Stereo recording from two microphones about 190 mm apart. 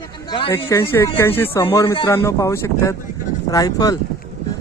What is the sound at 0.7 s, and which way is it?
Speech, 10° left (ahead or behind).